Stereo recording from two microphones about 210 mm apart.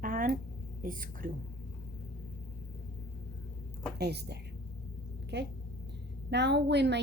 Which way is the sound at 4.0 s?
50° right (ahead or behind).